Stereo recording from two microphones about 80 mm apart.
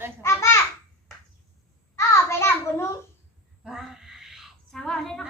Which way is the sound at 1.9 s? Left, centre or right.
Left.